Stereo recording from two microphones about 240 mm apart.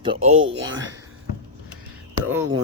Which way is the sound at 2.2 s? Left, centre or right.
Centre.